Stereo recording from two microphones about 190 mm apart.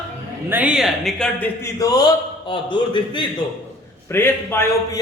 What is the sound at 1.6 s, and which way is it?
A man's voice, 20° left (ahead or behind).